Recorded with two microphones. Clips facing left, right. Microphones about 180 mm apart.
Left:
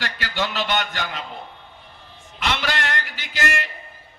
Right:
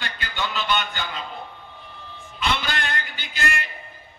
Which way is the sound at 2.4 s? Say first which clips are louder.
Left 1 dB; 85° left.